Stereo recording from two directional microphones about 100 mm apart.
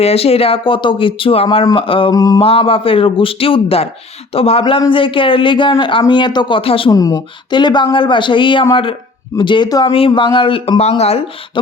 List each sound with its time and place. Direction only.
0.0 s speech: 85° left; by 2.1 s 60° left (ahead or behind)
2.1 s speech: 35° left (ahead or behind)
2.4 s speech: 70° left (ahead or behind)
4.9 s speech: 60° left (ahead or behind)
6.6 s speech: 65° left (ahead or behind)
6.9 s speech: 40° left (ahead or behind)
9.6 s speech: 40° left (ahead or behind)
9.9 s speech: 60° left (ahead or behind); by 11.2 s 90° left